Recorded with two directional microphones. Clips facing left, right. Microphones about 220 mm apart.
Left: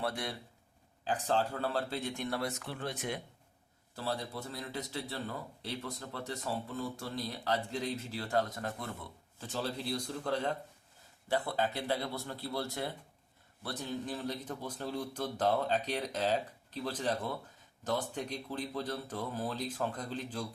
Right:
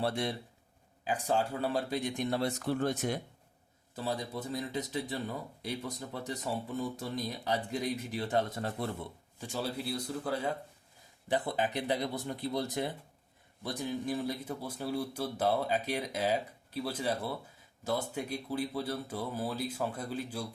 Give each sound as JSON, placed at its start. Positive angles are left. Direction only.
{"t": 0.0, "sound": "speech", "side_deg": -25}
{"t": 1.0, "sound": "a man's voice", "side_deg": -10}
{"t": 3.9, "sound": "a man's voice", "side_deg": -15}
{"t": 9.4, "sound": "a man's voice", "side_deg": -10}
{"t": 11.3, "sound": "a man's voice", "side_deg": -20}